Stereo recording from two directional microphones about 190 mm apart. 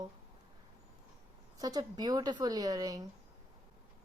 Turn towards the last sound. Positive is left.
turn(degrees=-20)  # may be behind; listen again after turning